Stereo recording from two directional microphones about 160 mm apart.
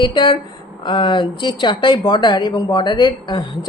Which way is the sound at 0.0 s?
30° left (ahead or behind).